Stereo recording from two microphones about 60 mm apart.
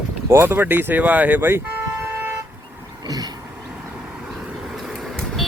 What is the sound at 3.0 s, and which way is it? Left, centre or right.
Vehicle, right.